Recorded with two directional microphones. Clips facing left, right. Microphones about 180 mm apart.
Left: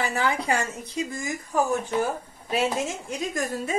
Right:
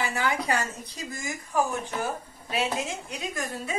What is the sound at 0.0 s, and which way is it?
A woman's voice, 30° left (ahead or behind).